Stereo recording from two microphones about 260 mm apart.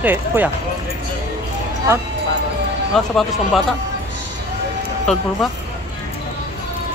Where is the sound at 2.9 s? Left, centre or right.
Centre.